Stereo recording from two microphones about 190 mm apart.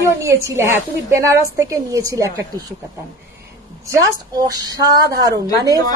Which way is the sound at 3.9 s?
20° right (ahead or behind).